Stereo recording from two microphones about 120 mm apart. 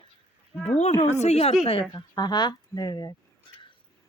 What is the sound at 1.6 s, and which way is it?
Speech, 50° left (ahead or behind).